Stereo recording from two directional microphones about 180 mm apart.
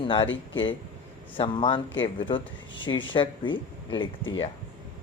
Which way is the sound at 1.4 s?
25° left (ahead or behind).